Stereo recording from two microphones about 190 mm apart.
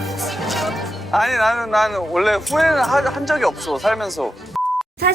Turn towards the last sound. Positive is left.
turn(degrees=0)  # may be behind; listen again after turning